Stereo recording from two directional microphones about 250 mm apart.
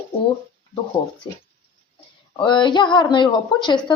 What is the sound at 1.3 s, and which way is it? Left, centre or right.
Speech, centre.